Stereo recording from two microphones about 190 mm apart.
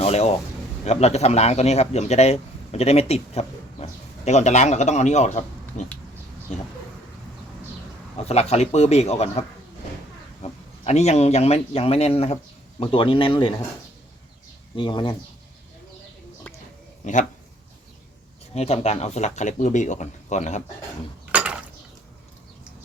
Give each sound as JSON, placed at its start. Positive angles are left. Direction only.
{"t": 0.0, "sound": "a man's voice", "side_deg": 35}
{"t": 8.1, "sound": "a man's voice", "side_deg": 35}
{"t": 10.4, "sound": "speech", "side_deg": 35}
{"t": 14.8, "sound": "speech", "side_deg": 25}
{"t": 18.5, "sound": "a man's voice", "side_deg": 35}
{"t": 21.3, "sound": "a sound", "side_deg": -5}